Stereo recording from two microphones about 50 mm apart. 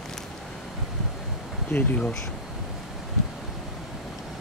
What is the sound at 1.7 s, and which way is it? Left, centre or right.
Speech, left.